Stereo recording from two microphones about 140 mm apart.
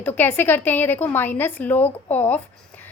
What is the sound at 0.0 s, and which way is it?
A woman's voice, 15° left (ahead or behind).